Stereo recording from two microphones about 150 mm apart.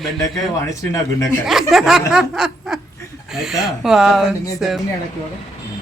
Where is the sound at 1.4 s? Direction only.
Centre (ahead or behind).